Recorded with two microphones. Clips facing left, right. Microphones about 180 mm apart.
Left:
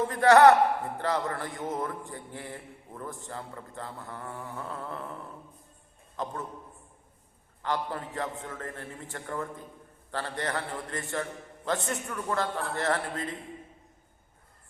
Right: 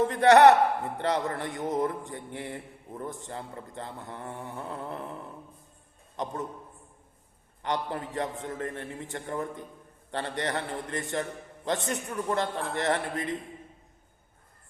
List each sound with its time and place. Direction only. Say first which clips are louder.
0.0 s a man's voice: right 1 dB; 20° right (ahead or behind)
7.6 s a man's voice: right 1 dB; 20° right (ahead or behind)